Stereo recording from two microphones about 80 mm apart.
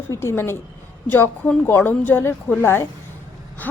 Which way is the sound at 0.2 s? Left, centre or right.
Left.